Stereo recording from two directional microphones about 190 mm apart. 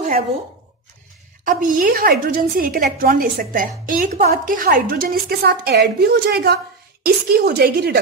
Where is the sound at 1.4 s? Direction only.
45° right (ahead or behind).